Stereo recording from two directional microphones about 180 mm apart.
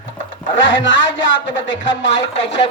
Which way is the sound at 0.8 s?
90° left.